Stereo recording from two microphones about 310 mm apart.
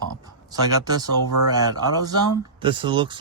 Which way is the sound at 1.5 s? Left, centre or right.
Centre.